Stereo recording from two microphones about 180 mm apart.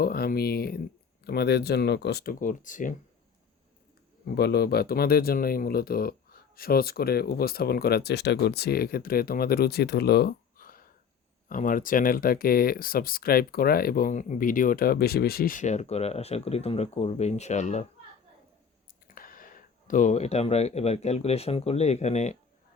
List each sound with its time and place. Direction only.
0.0 s speech: 55° left (ahead or behind)
4.4 s speech: 60° left (ahead or behind); by 17.8 s 40° left (ahead or behind)
19.0 s speech: 50° left (ahead or behind)